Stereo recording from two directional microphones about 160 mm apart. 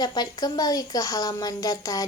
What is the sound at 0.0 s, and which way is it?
Speech, 25° left (ahead or behind).